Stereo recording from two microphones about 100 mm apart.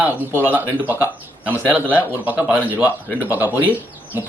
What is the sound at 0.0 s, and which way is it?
Speech, 20° right (ahead or behind).